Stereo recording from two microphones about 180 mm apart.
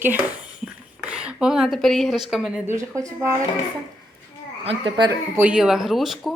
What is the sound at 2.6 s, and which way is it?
Speech, 15° right (ahead or behind).